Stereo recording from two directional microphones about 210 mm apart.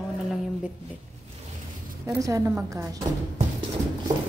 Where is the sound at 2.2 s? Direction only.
15° right (ahead or behind).